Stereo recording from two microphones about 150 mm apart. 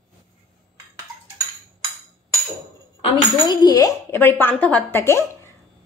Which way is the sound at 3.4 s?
25° left (ahead or behind).